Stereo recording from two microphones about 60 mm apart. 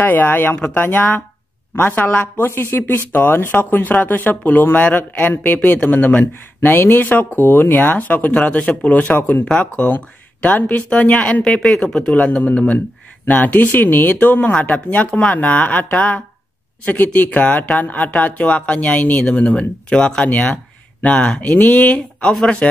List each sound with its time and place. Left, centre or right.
0.0 s speech: left
9.8 s speech: left; by 22.7 s centre